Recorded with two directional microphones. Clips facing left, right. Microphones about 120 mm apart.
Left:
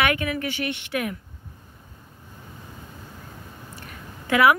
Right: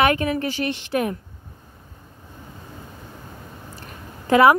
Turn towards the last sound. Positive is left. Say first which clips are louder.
# right 4 dB
turn(degrees=-35)  # may be behind; listen again after turning